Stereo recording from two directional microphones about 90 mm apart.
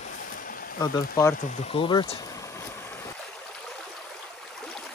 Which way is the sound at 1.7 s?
70° left (ahead or behind).